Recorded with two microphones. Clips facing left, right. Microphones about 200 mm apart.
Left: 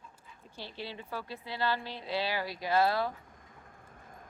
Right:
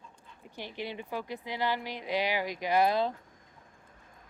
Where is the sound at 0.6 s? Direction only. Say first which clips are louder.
Right 4 dB; 15° right (ahead or behind).